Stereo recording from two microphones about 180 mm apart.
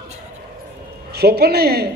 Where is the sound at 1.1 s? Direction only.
65° right (ahead or behind).